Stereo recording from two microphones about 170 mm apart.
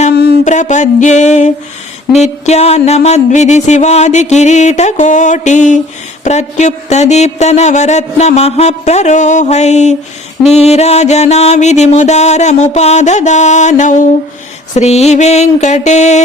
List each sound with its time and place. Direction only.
0.4 s music: 45° left (ahead or behind)
6.2 s speech: 45° left (ahead or behind)
10.5 s music: 40° left (ahead or behind)
14.8 s speech: 40° left (ahead or behind)